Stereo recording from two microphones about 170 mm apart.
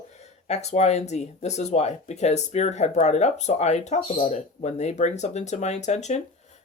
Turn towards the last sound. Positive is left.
turn(degrees=40)  # may be behind; listen again after turning